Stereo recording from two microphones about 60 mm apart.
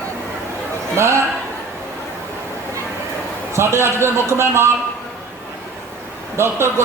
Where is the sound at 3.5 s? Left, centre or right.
Right.